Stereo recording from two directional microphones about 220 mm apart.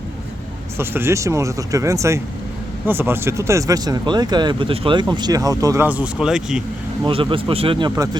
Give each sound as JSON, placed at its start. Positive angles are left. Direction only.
{"t": 0.8, "sound": "speech", "side_deg": -10}
{"t": 7.0, "sound": "speech", "side_deg": -25}